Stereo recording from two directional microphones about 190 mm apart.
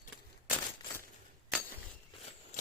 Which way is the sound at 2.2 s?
35° left (ahead or behind).